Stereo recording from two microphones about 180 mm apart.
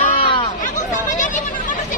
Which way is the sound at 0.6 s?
45° left (ahead or behind).